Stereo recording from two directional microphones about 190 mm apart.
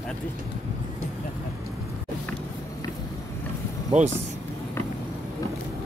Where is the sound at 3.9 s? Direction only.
35° right (ahead or behind).